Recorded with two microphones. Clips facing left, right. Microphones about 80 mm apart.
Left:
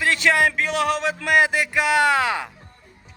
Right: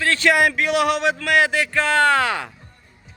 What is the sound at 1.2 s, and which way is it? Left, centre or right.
Speech, centre.